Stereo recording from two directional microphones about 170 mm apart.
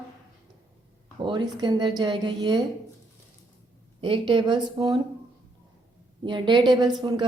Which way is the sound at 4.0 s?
30° right (ahead or behind).